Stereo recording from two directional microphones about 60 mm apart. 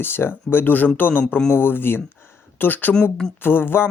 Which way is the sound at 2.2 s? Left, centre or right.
Left.